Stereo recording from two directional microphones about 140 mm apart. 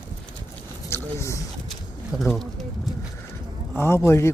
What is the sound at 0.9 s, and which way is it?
Speech, 20° left (ahead or behind).